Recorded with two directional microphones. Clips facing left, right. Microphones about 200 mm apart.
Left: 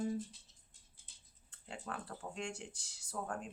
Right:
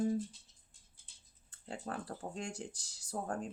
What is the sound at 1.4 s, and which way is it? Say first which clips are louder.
Speech: right 4 dB; 40° right (ahead or behind).